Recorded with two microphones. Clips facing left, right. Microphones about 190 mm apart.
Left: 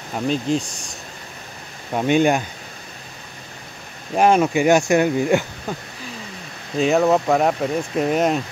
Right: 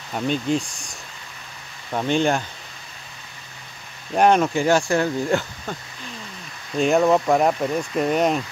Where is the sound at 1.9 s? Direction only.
10° left (ahead or behind).